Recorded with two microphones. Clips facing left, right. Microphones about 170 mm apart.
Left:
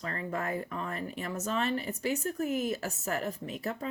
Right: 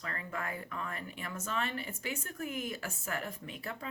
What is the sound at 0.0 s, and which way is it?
Speech, 35° left (ahead or behind).